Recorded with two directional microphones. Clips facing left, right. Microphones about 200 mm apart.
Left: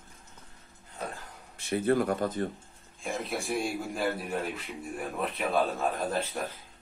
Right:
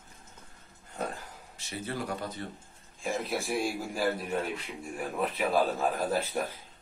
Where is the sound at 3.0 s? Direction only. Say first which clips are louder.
Right 1 dB; centre (ahead or behind).